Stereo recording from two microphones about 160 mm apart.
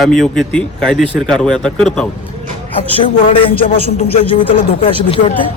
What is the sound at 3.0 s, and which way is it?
Speech, 35° left (ahead or behind).